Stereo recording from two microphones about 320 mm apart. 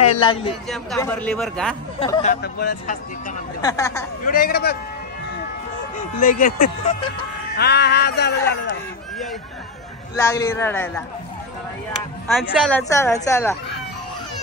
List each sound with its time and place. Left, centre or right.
0.2 s a woman's voice: centre
2.0 s speech: centre
2.4 s speech: left
3.6 s a woman's voice: centre
4.2 s speech: left
5.9 s speech: left
7.5 s a sound: left
10.1 s a woman's voice: centre
12.3 s a woman's voice: centre